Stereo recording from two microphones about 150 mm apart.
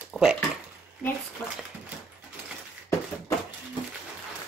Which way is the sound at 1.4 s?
5° right (ahead or behind).